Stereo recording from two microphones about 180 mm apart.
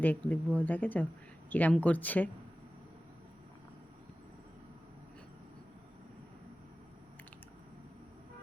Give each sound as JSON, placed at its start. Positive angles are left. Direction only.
{"t": 0.0, "sound": "speech", "side_deg": 10}